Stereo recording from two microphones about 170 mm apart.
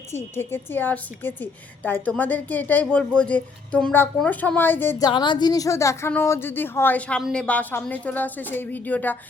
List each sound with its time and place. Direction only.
0.3 s a woman's voice: 10° left (ahead or behind)
5.0 s a woman's voice: 25° left (ahead or behind); by 9.1 s 10° left (ahead or behind)